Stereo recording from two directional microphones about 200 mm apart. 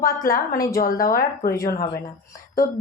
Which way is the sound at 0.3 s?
45° left (ahead or behind).